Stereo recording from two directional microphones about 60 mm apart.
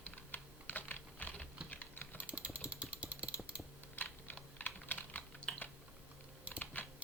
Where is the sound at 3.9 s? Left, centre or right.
Left.